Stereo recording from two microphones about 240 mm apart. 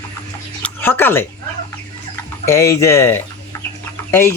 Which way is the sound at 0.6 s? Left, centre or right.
Centre.